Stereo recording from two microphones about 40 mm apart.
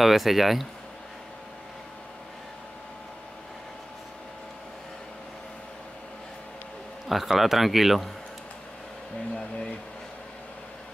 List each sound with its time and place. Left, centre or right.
0.0 s speech: centre
7.1 s speech: centre
9.3 s speech: centre